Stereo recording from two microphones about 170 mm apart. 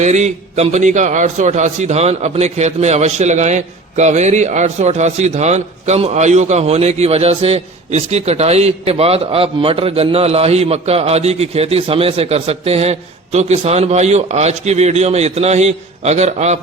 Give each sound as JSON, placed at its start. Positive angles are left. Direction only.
{"t": 0.0, "sound": "a man's voice", "side_deg": -45}